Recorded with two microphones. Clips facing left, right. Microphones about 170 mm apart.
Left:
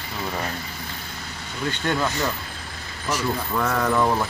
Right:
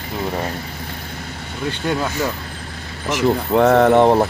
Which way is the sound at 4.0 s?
35° right (ahead or behind).